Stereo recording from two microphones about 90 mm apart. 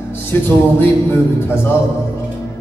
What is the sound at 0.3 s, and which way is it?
Music, 20° left (ahead or behind).